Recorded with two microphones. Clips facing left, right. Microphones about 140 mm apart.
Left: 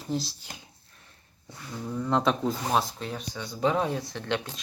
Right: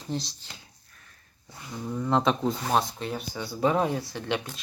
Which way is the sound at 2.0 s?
Centre (ahead or behind).